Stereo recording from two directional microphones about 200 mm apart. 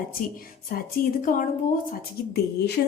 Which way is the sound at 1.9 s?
55° left (ahead or behind).